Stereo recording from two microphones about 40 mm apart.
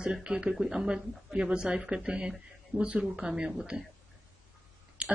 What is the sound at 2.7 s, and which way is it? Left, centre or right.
Speech, right.